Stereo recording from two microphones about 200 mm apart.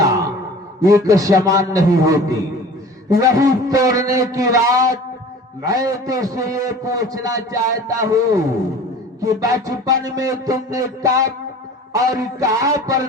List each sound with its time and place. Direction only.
0.8 s a man's voice: 15° right (ahead or behind)